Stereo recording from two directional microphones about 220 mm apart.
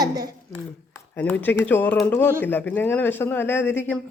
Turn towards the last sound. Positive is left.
turn(degrees=10)  # may be behind; listen again after turning